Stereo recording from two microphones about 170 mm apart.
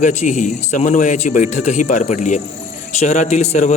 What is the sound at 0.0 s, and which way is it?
A man's voice, 45° left (ahead or behind).